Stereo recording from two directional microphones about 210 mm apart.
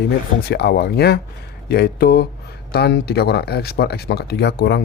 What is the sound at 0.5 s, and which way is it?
Speech, 50° left (ahead or behind).